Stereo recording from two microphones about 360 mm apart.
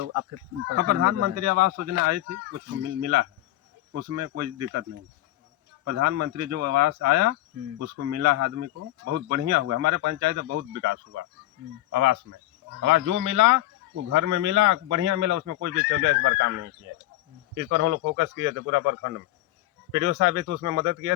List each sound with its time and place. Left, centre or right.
0.8 s speech: right